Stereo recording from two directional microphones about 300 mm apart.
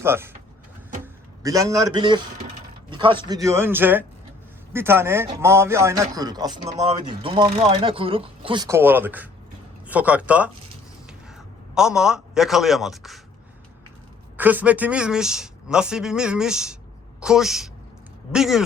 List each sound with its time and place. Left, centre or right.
0.0 s speech: centre
11.7 s speech: centre
14.3 s speech: centre